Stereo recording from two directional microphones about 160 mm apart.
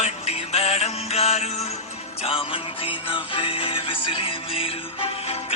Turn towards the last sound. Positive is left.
turn(degrees=35)  # may be behind; listen again after turning